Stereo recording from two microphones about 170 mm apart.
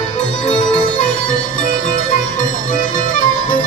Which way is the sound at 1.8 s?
45° left (ahead or behind).